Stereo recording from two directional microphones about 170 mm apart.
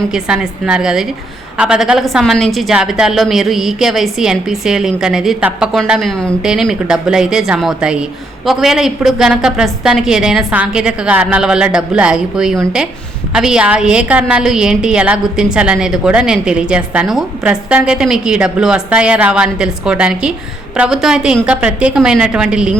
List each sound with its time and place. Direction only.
0.1 s a woman's voice: 5° right (ahead or behind)